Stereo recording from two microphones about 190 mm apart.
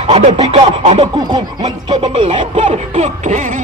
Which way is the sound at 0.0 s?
30° right (ahead or behind).